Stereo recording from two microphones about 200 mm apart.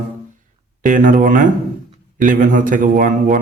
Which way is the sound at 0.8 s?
40° right (ahead or behind).